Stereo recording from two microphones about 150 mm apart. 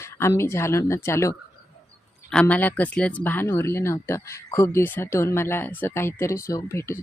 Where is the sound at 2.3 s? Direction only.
10° left (ahead or behind).